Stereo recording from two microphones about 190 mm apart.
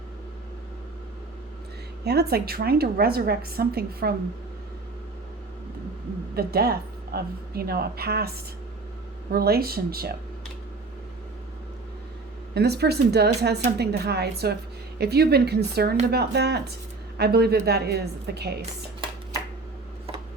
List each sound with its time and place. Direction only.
2.0 s a woman's voice: 55° right (ahead or behind)
6.3 s a woman's voice: 55° right (ahead or behind)
12.5 s a woman's voice: 60° right (ahead or behind)